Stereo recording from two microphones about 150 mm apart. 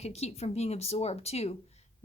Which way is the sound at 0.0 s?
45° left (ahead or behind).